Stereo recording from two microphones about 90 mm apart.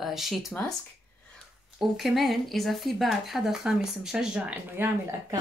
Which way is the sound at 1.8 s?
Centre (ahead or behind).